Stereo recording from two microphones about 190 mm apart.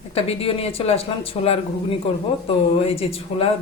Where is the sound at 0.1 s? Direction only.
30° left (ahead or behind).